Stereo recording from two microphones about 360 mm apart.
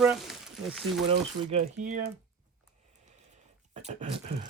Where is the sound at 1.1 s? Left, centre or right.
Centre.